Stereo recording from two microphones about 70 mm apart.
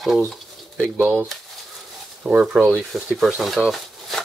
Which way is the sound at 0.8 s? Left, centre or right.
Right.